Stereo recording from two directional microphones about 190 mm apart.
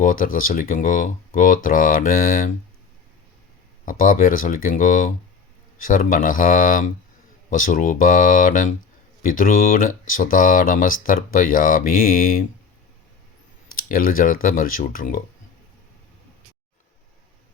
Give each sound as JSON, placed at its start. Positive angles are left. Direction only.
{"t": 0.0, "sound": "speech", "side_deg": 45}
{"t": 3.8, "sound": "speech", "side_deg": 45}
{"t": 13.7, "sound": "speech", "side_deg": 50}